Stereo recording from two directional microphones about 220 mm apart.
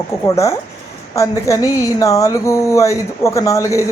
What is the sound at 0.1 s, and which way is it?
Speech, 10° left (ahead or behind).